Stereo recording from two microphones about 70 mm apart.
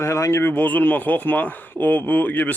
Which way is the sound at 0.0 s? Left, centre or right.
Left.